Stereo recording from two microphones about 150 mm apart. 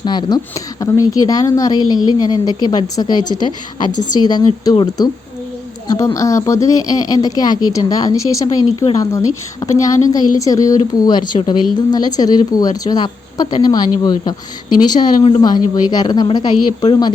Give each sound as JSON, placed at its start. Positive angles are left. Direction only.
{"t": 0.0, "sound": "speech", "side_deg": 30}